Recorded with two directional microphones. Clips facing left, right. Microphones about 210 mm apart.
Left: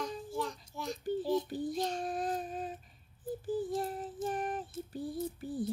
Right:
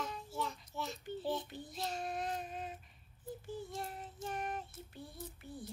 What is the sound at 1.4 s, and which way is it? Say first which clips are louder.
Child singing: left 9 dB; 40° left (ahead or behind).